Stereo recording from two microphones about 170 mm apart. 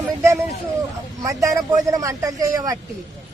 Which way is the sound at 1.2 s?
20° right (ahead or behind).